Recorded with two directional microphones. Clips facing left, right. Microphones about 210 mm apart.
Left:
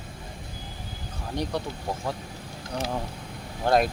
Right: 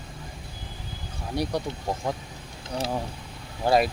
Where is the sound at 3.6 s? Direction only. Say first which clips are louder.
Right 1 dB; 5° right (ahead or behind).